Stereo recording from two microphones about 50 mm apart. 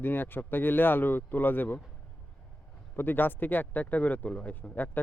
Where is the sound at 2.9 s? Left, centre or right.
Left.